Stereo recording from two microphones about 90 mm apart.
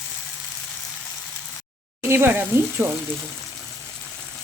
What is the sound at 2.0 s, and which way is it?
Sizzle, 25° right (ahead or behind).